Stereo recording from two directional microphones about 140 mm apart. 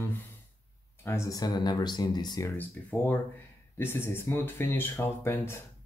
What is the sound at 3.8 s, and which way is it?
Speech, 15° left (ahead or behind).